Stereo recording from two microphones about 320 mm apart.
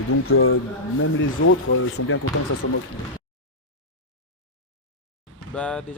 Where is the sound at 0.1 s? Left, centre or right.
Left.